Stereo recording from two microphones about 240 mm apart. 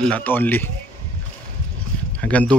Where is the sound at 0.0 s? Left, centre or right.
Centre.